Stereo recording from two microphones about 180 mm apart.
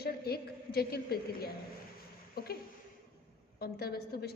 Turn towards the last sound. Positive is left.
turn(degrees=60)  # may be behind; listen again after turning